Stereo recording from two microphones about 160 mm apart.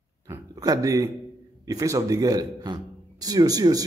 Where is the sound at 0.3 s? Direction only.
20° right (ahead or behind).